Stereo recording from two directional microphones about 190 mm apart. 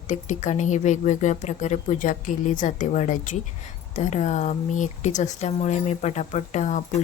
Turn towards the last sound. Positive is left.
turn(degrees=40)  # may be behind; listen again after turning